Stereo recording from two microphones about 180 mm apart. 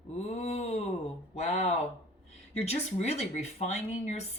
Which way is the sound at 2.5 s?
35° left (ahead or behind).